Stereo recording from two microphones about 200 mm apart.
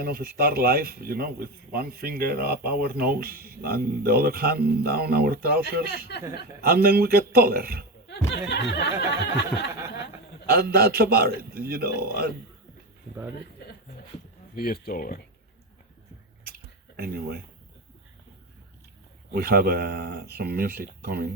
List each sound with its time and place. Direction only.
0.0 s speech: 50° right (ahead or behind)
6.1 s a sound: 55° left (ahead or behind)
6.6 s speech: 50° right (ahead or behind)
8.3 s a sound: 60° left (ahead or behind)
10.4 s speech: 50° right (ahead or behind)
14.5 s speech: 50° left (ahead or behind)
17.0 s speech: 50° right (ahead or behind)
19.3 s speech: 50° right (ahead or behind)